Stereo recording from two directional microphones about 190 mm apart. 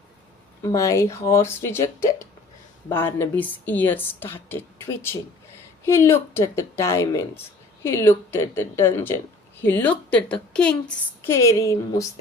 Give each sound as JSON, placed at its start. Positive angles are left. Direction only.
{"t": 0.6, "sound": "a woman's voice", "side_deg": 15}